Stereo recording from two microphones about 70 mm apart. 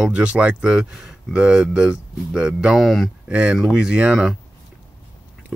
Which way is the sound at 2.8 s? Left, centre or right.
Centre.